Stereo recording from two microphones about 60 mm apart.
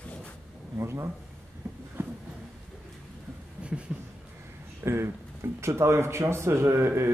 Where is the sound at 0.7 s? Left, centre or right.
Right.